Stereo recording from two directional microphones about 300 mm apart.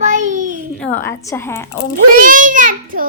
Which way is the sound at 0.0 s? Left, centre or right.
Right.